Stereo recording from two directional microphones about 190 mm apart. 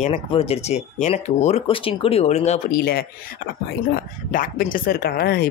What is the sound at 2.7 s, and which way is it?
Speech, 50° left (ahead or behind).